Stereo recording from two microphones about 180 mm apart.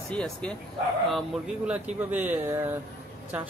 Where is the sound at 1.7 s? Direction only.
10° right (ahead or behind).